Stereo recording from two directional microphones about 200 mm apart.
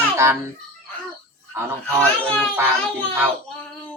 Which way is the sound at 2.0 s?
5° left (ahead or behind).